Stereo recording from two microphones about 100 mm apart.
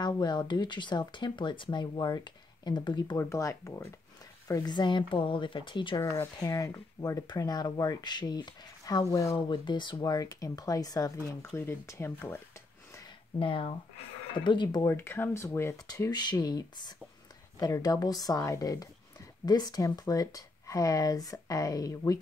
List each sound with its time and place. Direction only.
0.0 s speech: 45° left (ahead or behind)
3.2 s speech: 30° left (ahead or behind)
4.7 s speech: 50° left (ahead or behind)
6.4 s speech: 35° left (ahead or behind)
9.5 s speech: 50° left (ahead or behind)
11.5 s speech: 25° left (ahead or behind)
13.4 s speech: 60° left (ahead or behind)
14.9 s speech: 20° left (ahead or behind)
15.9 s speech: 40° left (ahead or behind)